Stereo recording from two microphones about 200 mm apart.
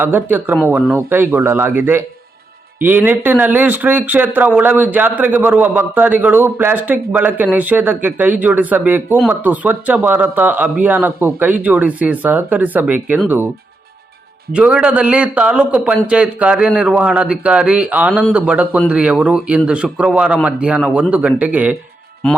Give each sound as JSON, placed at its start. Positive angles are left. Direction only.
{"t": 0.0, "sound": "speech", "side_deg": -10}
{"t": 14.5, "sound": "a man's voice", "side_deg": -5}
{"t": 22.2, "sound": "a man's voice", "side_deg": 5}